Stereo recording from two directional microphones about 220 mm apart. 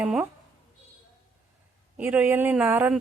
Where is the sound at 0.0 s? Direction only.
5° right (ahead or behind).